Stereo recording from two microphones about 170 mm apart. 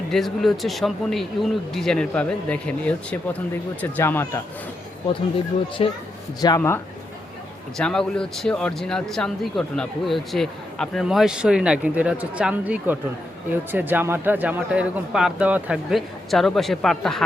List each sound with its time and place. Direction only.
0.1 s speech: centre (ahead or behind)
5.8 s speech: 35° left (ahead or behind)
6.4 s speech: 25° left (ahead or behind)
7.8 s speech: 5° left (ahead or behind)